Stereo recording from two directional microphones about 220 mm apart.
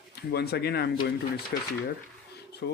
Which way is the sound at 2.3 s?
50° left (ahead or behind).